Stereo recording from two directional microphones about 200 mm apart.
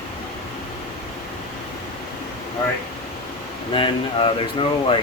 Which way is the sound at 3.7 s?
25° left (ahead or behind).